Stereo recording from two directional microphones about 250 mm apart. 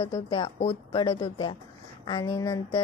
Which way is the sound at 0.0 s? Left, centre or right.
Centre.